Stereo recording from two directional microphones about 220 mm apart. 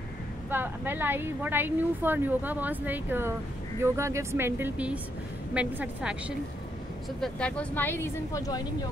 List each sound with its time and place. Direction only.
0.5 s a woman's voice: 10° right (ahead or behind)
7.2 s speech: 5° left (ahead or behind)